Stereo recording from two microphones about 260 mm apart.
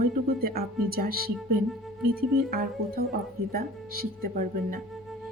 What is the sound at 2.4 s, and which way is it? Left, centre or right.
Speech, right.